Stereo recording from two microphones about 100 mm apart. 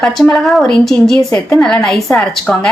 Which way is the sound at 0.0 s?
5° left (ahead or behind).